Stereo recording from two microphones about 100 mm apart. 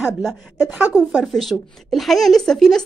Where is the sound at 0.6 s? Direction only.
15° right (ahead or behind).